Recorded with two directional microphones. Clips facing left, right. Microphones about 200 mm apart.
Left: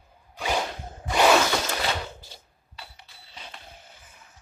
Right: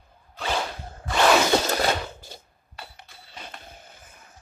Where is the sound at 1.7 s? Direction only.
45° right (ahead or behind).